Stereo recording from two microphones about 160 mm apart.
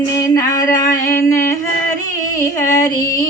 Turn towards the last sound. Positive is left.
turn(degrees=20)  # may be behind; listen again after turning